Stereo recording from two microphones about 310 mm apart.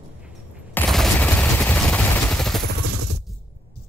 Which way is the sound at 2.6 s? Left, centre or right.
Right.